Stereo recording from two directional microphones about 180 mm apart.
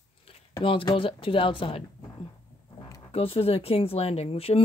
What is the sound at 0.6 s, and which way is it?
Speech, 30° left (ahead or behind).